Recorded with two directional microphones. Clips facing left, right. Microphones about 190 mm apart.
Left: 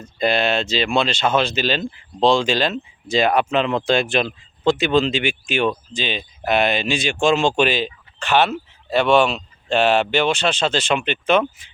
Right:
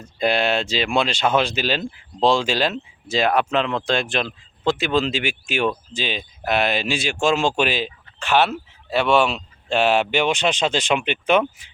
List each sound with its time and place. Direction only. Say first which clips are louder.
0.0 s speech: left 1 dB; 10° right (ahead or behind)